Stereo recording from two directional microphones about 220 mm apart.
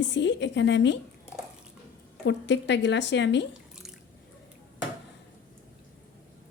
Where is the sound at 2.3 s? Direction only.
55° left (ahead or behind).